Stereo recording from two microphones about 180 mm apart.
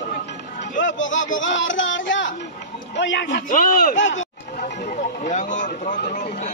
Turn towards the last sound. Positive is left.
turn(degrees=45)  # may be behind; listen again after turning